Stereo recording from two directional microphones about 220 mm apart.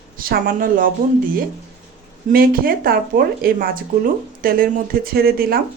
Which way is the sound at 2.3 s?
40° right (ahead or behind).